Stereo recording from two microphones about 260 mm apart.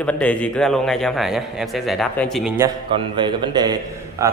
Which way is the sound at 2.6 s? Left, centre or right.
Centre.